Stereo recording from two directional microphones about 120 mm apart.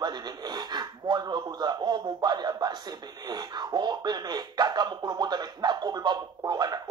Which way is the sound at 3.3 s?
35° right (ahead or behind).